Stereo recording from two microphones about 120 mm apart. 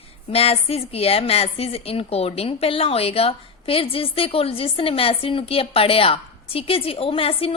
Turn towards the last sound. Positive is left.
turn(degrees=50)  # may be behind; listen again after turning